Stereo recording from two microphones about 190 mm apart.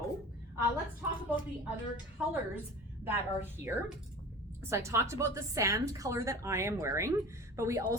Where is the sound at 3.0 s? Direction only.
10° right (ahead or behind).